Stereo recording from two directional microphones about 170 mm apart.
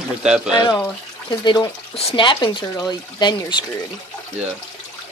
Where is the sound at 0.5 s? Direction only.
25° left (ahead or behind).